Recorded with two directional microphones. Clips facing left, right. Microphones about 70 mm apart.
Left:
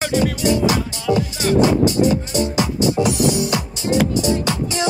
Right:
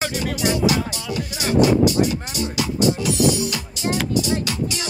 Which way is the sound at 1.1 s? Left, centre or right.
Centre.